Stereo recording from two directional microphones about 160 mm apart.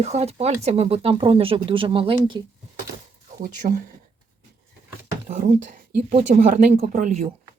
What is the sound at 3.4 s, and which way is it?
Speech, 60° right (ahead or behind).